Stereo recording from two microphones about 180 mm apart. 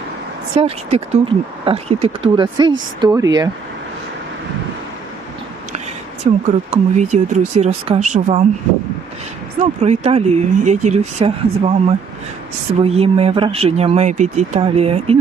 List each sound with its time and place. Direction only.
0.5 s speech: 35° right (ahead or behind)
6.3 s speech: 35° right (ahead or behind)
9.6 s speech: 40° right (ahead or behind)